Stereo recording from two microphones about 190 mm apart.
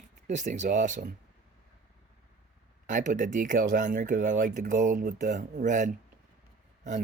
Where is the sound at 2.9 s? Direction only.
40° right (ahead or behind).